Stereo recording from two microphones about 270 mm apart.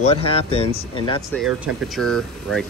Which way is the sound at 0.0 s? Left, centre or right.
Left.